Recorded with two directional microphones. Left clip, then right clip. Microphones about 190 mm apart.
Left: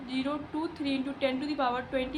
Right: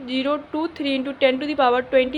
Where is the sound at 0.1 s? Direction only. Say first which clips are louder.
Right 10 dB; 25° right (ahead or behind).